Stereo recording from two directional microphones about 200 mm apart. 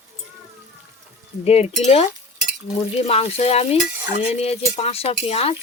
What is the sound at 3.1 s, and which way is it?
Speech, 30° left (ahead or behind).